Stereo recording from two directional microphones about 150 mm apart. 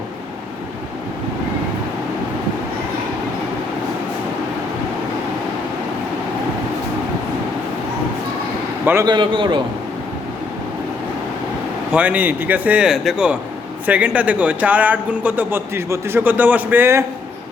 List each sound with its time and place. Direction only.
8.8 s a man's voice: 15° right (ahead or behind)
9.0 s a man's voice: 30° right (ahead or behind)
11.9 s a man's voice: 10° right (ahead or behind)